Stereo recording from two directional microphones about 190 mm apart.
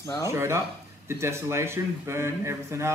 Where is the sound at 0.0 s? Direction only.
20° left (ahead or behind).